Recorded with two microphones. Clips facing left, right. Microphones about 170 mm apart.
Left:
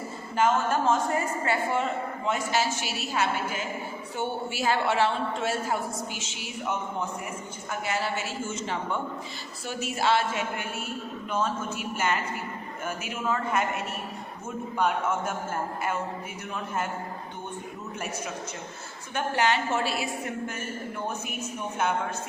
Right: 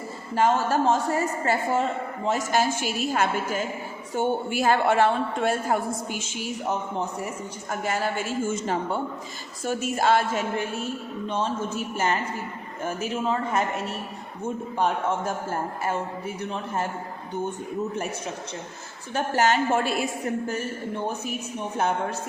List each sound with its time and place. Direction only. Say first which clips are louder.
0.3 s a woman's voice: right 2 dB; 35° right (ahead or behind)
16.4 s a woman's voice: right 3 dB; 35° right (ahead or behind)
19.1 s a woman's voice: right 3 dB; 45° right (ahead or behind)
20.5 s a woman's voice: right 5 dB; 35° right (ahead or behind)